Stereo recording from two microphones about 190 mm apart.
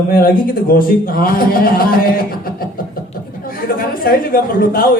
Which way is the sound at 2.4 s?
50° left (ahead or behind).